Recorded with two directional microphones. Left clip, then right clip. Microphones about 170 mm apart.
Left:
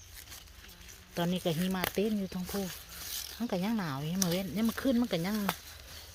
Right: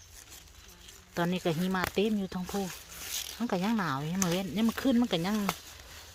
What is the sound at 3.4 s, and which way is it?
Speech, 25° right (ahead or behind).